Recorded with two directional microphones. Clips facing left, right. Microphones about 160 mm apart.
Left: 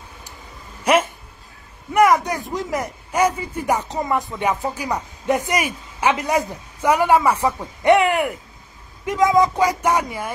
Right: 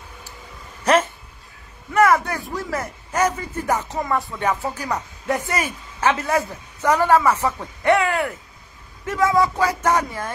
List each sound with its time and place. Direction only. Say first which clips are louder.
0.8 s speech: even; 10° left (ahead or behind)